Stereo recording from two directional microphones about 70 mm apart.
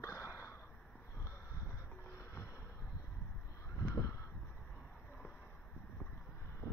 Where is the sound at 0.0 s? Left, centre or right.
Left.